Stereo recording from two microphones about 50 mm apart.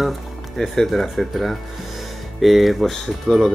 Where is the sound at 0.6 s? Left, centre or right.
Centre.